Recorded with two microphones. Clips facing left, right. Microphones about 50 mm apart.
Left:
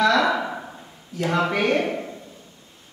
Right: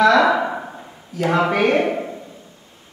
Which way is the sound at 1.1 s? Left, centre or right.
Centre.